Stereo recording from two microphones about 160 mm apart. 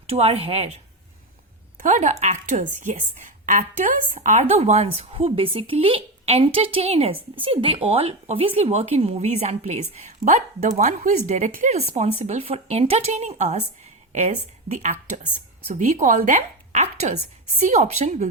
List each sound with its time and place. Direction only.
0.1 s a woman's voice: 40° right (ahead or behind)
1.8 s a woman's voice: 50° right (ahead or behind)